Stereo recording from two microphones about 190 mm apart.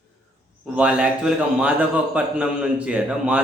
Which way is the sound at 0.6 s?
5° right (ahead or behind).